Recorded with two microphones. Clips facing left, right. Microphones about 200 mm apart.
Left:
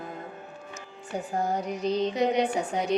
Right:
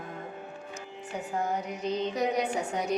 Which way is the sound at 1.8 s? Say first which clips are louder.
Left 4 dB; 35° left (ahead or behind).